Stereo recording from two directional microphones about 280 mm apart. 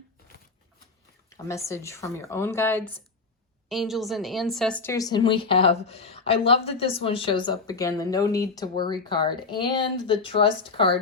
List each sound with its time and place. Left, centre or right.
1.3 s speech: centre